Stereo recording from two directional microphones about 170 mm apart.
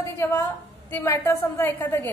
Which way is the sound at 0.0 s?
15° left (ahead or behind).